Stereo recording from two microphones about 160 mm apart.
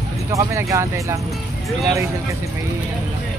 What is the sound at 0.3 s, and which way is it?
Speech, 20° right (ahead or behind).